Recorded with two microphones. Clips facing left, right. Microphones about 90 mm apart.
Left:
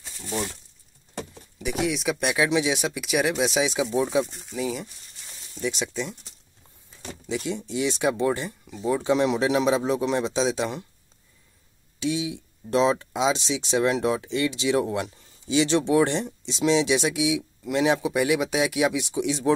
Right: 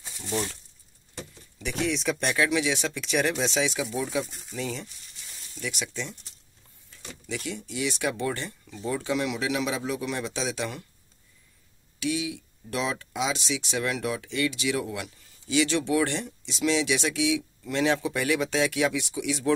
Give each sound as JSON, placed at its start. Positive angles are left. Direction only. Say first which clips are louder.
{"t": 0.0, "sound": "a sound", "louder": "even", "side_deg": 0}
{"t": 1.6, "sound": "speech", "louder": "left 2 dB", "side_deg": 10}
{"t": 2.4, "sound": "speech", "louder": "left 3 dB", "side_deg": 20}
{"t": 4.3, "sound": "speech", "louder": "left 4 dB", "side_deg": 0}
{"t": 5.5, "sound": "speech", "louder": "left 6 dB", "side_deg": 25}
{"t": 7.2, "sound": "speech", "louder": "left 5 dB", "side_deg": 20}
{"t": 9.1, "sound": "speech", "louder": "left 7 dB", "side_deg": 30}
{"t": 12.0, "sound": "speech", "louder": "left 2 dB", "side_deg": 25}